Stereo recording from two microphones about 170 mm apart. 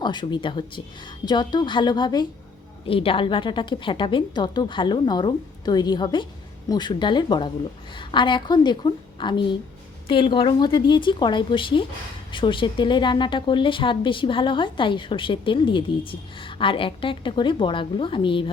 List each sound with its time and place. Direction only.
0.0 s a woman's voice: 25° left (ahead or behind)